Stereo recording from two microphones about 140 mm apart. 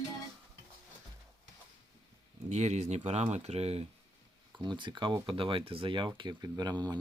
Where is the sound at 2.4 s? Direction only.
50° right (ahead or behind).